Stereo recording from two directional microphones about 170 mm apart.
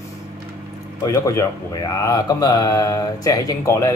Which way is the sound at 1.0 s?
20° left (ahead or behind).